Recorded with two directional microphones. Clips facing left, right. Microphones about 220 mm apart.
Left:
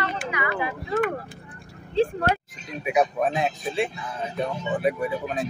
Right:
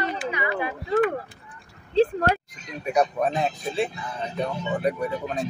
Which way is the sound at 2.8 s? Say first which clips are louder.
Even; 5° left (ahead or behind).